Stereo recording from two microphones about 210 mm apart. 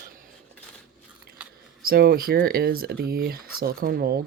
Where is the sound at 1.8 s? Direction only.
50° right (ahead or behind).